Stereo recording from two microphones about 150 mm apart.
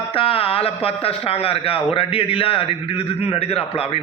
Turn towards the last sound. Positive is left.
turn(degrees=40)  # may be behind; listen again after turning